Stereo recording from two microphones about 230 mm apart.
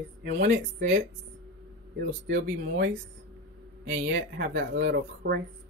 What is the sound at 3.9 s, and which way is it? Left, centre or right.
Speech, right.